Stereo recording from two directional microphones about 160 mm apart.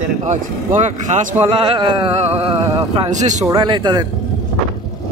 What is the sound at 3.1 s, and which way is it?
Speech, 50° right (ahead or behind).